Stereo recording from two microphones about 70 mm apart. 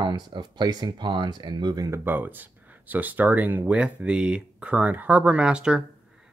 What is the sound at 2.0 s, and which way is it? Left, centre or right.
Speech, right.